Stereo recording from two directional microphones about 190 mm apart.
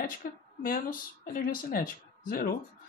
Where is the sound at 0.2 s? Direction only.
45° left (ahead or behind).